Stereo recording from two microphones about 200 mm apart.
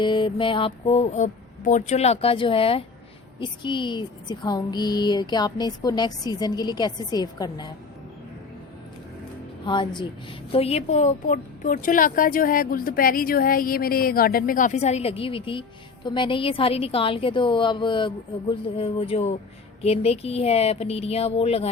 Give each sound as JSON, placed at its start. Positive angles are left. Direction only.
{"t": 0.0, "sound": "a woman's voice", "side_deg": 25}
{"t": 9.6, "sound": "a woman's voice", "side_deg": 25}